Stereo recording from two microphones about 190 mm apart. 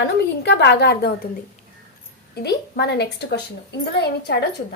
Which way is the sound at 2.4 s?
60° left (ahead or behind).